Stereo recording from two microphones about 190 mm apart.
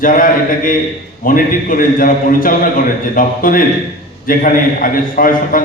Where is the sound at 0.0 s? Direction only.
45° left (ahead or behind).